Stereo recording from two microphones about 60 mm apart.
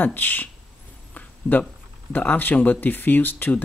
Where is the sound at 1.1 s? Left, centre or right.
Left.